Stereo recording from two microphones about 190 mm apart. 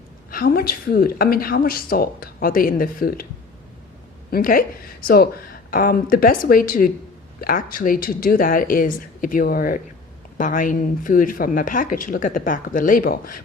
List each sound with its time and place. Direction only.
0.3 s speech: 50° left (ahead or behind)
4.3 s speech: 50° left (ahead or behind)